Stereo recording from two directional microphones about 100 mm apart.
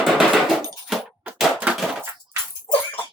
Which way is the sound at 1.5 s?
15° right (ahead or behind).